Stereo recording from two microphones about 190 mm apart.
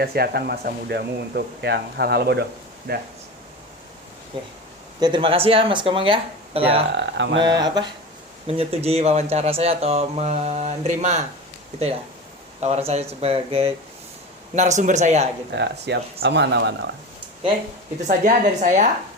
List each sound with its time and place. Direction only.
0.0 s speech: 55° right (ahead or behind)
4.3 s speech: 25° right (ahead or behind)
6.9 s speech: 65° right (ahead or behind)
7.3 s speech: 25° right (ahead or behind)
12.5 s speech: 35° right (ahead or behind)
15.5 s speech: 65° right (ahead or behind)
18.3 s speech: 40° right (ahead or behind)